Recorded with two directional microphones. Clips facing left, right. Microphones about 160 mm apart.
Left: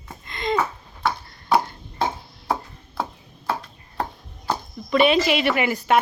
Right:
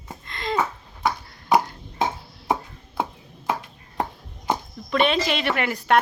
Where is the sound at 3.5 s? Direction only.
20° right (ahead or behind).